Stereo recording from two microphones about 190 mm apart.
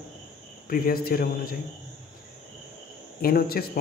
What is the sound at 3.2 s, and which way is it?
Speech, 50° left (ahead or behind).